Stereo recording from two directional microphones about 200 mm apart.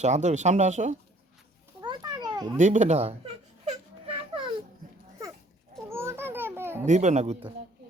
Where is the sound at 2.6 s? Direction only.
35° right (ahead or behind).